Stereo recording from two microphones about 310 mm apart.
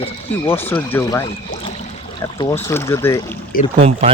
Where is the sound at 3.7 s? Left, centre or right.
Centre.